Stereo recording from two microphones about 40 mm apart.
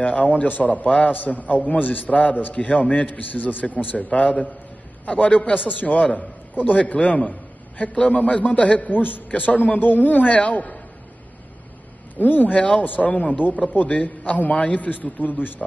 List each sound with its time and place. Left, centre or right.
0.0 s a man's voice: left
12.2 s a man's voice: left
12.5 s a man's voice: left
12.8 s a man's voice: left
13.1 s a man's voice: left